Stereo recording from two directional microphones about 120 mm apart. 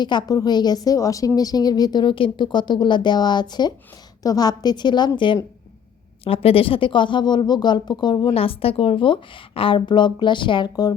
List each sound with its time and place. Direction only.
0.0 s speech: 40° left (ahead or behind)
6.2 s speech: 55° left (ahead or behind); by 8.3 s 40° left (ahead or behind)
8.3 s a woman's voice: 50° left (ahead or behind); by 10.9 s 35° left (ahead or behind)